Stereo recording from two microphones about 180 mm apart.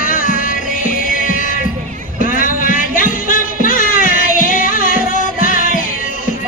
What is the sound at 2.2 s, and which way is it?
Music, 50° left (ahead or behind).